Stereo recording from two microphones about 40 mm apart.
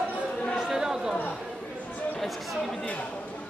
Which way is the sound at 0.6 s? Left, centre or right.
Centre.